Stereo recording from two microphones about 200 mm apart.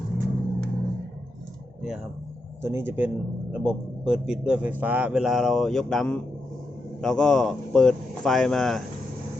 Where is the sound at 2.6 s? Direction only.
10° right (ahead or behind).